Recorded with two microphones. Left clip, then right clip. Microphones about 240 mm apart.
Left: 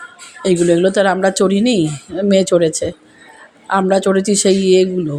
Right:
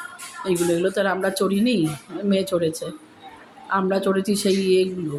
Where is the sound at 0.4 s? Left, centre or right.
Left.